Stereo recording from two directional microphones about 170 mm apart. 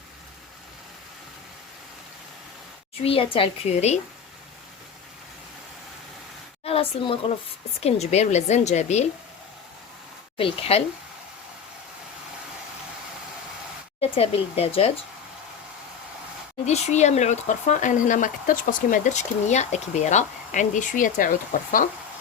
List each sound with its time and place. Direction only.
3.0 s a woman's voice: 35° left (ahead or behind)
6.7 s a woman's voice: 35° left (ahead or behind)
10.3 s a woman's voice: 35° left (ahead or behind)
14.0 s a woman's voice: 35° left (ahead or behind)
16.6 s speech: 40° left (ahead or behind)